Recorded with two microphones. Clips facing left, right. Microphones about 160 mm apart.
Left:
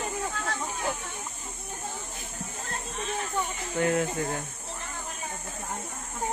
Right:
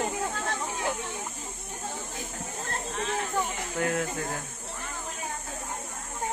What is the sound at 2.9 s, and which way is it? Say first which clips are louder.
Speech: right 2 dB; 90° right.